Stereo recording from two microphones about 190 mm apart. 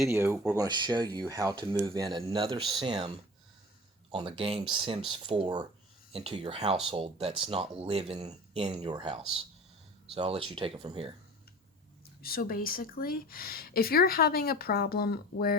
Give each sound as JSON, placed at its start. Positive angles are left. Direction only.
{"t": 0.1, "sound": "speech", "side_deg": -15}
{"t": 4.1, "sound": "speech", "side_deg": -25}
{"t": 12.2, "sound": "speech", "side_deg": 50}